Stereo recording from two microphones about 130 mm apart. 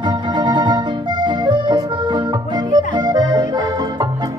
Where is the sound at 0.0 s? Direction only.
35° right (ahead or behind).